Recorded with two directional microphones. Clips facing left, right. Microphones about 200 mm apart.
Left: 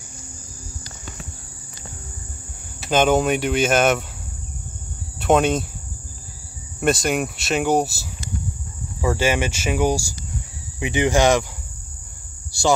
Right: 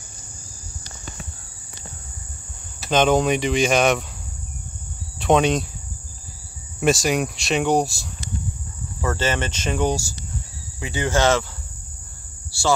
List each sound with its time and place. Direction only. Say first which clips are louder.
2.9 s speech: even; 5° left (ahead or behind)
5.2 s speech: even; 5° left (ahead or behind)
6.8 s speech: right 1 dB; centre (ahead or behind)
12.5 s speech: left 3 dB; 15° left (ahead or behind)